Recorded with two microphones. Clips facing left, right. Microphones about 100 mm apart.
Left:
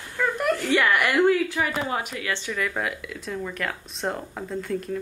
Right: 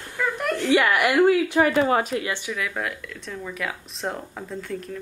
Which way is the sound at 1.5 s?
60° right (ahead or behind).